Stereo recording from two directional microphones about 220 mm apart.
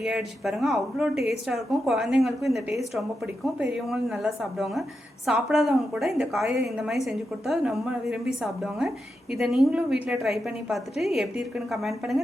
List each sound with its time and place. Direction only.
0.0 s a woman's voice: centre (ahead or behind)